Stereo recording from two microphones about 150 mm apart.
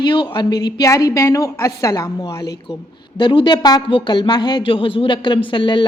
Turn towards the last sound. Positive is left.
turn(degrees=30)  # may be behind; listen again after turning